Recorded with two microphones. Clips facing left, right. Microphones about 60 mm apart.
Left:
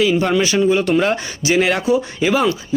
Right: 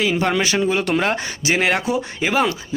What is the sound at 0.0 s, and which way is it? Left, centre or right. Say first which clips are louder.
Speech: left 3 dB; right.